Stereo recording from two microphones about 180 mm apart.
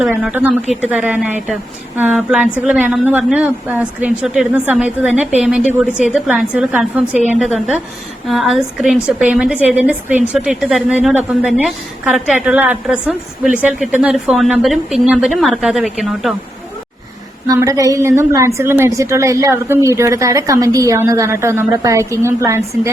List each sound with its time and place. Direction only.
0.0 s a woman's voice: 5° right (ahead or behind)
17.4 s a woman's voice: 15° right (ahead or behind)